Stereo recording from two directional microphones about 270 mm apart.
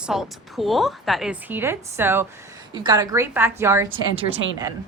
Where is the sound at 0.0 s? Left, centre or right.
Centre.